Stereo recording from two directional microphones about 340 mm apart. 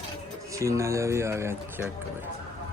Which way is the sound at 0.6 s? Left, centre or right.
Centre.